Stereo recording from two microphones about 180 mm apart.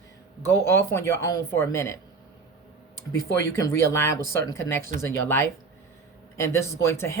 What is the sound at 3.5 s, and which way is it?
Speech, 15° left (ahead or behind).